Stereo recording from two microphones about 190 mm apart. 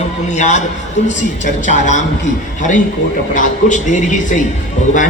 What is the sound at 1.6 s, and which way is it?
A woman's voice, 40° left (ahead or behind).